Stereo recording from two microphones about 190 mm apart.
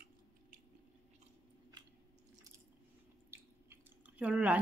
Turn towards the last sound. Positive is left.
turn(degrees=-10)  # may be behind; listen again after turning